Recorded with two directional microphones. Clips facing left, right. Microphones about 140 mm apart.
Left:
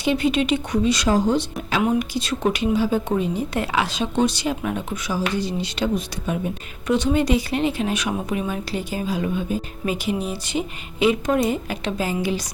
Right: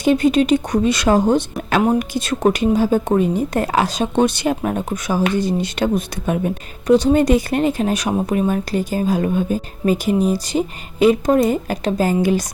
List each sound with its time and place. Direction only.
0.0 s speech: 45° right (ahead or behind)
4.1 s speech: 55° right (ahead or behind)
6.8 s speech: 35° right (ahead or behind)